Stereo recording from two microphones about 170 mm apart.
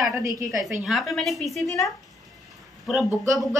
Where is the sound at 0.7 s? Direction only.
5° right (ahead or behind).